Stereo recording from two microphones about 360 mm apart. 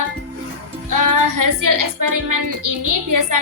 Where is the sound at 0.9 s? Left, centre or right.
Right.